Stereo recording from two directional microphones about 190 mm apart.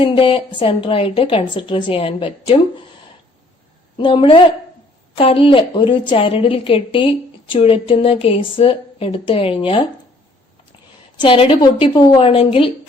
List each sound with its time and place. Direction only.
0.0 s a woman's voice: 25° left (ahead or behind)
3.9 s a woman's voice: 25° left (ahead or behind)
11.2 s a woman's voice: 25° left (ahead or behind)